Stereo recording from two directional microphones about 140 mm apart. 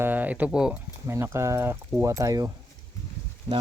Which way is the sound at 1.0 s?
20° right (ahead or behind).